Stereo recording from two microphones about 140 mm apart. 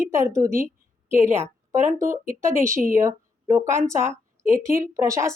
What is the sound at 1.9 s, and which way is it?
Speech, 20° right (ahead or behind).